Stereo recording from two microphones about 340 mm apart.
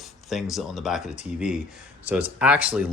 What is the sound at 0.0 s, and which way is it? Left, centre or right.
Speech, centre.